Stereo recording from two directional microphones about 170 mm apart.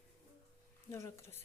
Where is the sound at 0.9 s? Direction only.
15° left (ahead or behind).